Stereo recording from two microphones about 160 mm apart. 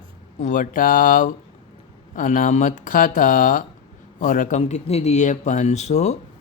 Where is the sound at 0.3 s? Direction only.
50° left (ahead or behind).